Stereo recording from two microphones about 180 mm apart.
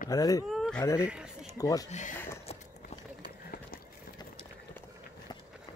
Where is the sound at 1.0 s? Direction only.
5° right (ahead or behind).